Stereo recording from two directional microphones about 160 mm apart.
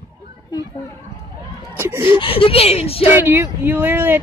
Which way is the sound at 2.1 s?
35° left (ahead or behind).